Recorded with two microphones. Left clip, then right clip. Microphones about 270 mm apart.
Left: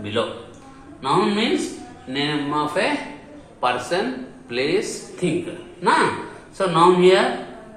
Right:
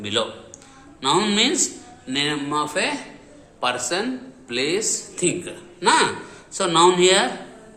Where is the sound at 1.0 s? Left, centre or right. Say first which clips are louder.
Right 1 dB; right.